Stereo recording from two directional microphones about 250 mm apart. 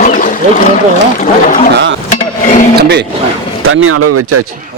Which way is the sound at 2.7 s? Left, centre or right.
Right.